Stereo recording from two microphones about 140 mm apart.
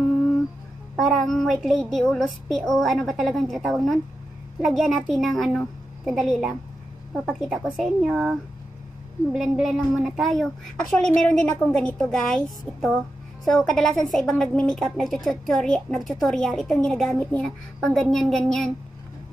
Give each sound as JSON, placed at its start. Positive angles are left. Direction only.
{"t": 0.9, "sound": "a woman's voice", "side_deg": 0}